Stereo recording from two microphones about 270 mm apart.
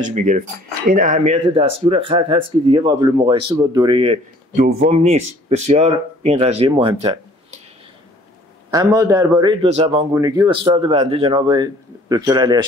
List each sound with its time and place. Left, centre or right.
0.0 s speech: right
4.6 s speech: right
4.9 s speech: right
8.6 s a man's voice: centre